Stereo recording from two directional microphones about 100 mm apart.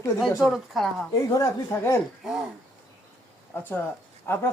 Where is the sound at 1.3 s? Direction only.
30° left (ahead or behind).